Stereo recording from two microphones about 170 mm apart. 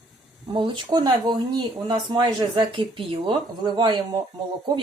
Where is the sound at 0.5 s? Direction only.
30° right (ahead or behind).